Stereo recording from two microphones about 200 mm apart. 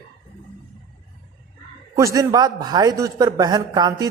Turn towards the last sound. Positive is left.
turn(degrees=-20)  # may be behind; listen again after turning